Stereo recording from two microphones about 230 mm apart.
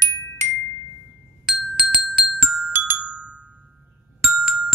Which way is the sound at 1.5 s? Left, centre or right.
Centre.